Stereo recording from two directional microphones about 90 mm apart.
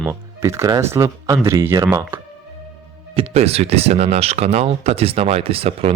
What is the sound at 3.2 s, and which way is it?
Speech, 90° right.